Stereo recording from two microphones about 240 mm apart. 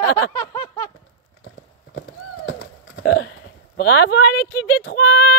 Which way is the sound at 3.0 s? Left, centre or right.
Left.